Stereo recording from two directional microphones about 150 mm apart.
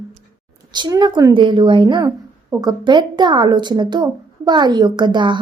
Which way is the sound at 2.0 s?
20° right (ahead or behind).